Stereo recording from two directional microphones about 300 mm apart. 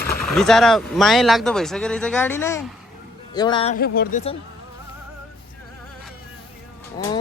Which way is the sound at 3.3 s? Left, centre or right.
Centre.